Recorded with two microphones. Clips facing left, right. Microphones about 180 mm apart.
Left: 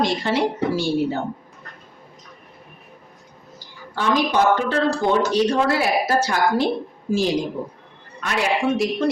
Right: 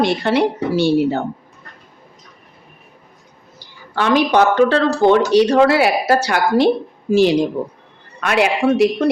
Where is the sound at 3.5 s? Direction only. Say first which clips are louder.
Right 6 dB; 70° right (ahead or behind).